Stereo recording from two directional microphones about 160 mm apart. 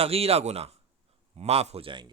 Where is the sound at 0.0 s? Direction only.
40° right (ahead or behind).